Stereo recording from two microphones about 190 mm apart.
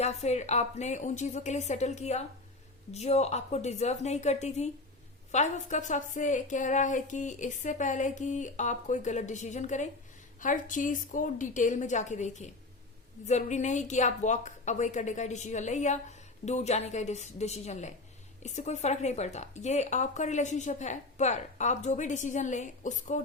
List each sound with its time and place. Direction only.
0.0 s speech: 35° left (ahead or behind)